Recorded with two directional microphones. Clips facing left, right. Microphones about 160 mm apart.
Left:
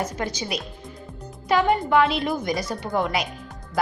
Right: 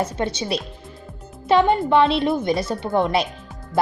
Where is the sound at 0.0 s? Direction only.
25° right (ahead or behind).